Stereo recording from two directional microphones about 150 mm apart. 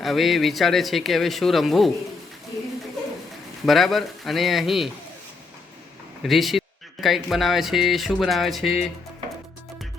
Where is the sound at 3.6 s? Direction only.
Centre (ahead or behind).